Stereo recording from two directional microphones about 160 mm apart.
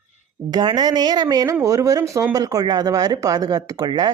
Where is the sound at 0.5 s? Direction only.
25° right (ahead or behind).